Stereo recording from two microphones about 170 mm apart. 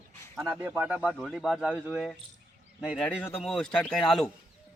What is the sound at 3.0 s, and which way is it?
Speech, 15° left (ahead or behind).